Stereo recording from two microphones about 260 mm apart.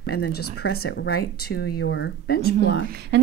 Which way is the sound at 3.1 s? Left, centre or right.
Right.